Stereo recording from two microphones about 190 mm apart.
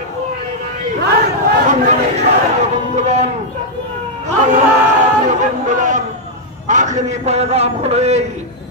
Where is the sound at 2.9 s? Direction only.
35° right (ahead or behind).